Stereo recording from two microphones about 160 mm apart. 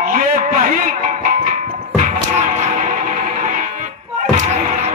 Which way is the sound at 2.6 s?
50° right (ahead or behind).